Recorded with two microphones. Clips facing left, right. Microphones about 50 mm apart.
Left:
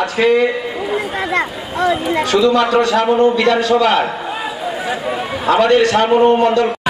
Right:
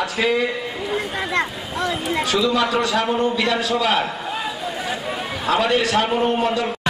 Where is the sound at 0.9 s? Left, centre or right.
Centre.